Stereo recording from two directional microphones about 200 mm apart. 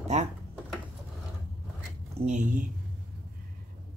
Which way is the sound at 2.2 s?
40° right (ahead or behind).